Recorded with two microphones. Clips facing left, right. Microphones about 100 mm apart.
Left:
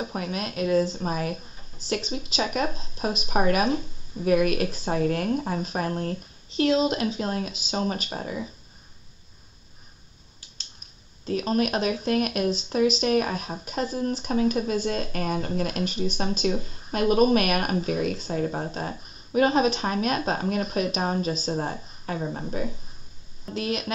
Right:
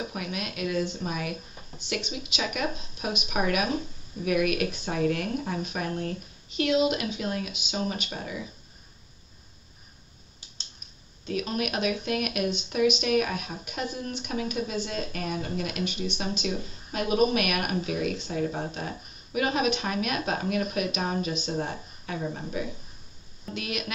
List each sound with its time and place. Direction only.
0.1 s speech: 35° left (ahead or behind)
11.2 s speech: 35° left (ahead or behind)